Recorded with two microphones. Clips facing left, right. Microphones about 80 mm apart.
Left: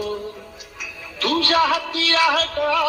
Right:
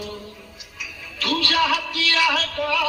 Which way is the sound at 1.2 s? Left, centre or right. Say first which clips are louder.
Left 3 dB; left.